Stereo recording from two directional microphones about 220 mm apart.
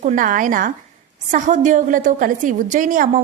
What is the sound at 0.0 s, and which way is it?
A woman's voice, 35° right (ahead or behind).